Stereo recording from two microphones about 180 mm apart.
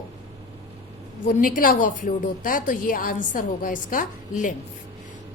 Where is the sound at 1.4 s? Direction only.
50° left (ahead or behind).